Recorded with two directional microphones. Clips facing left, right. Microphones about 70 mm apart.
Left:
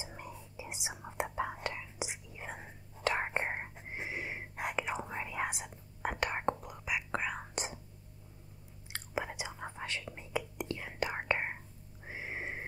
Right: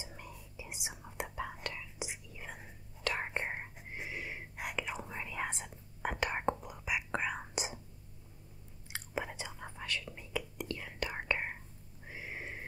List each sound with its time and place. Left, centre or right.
0.0 s whispering: left
5.5 s whispering: centre
9.1 s whispering: centre
12.0 s a sound: left